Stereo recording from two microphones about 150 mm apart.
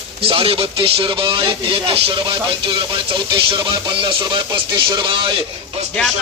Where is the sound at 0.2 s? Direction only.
40° right (ahead or behind).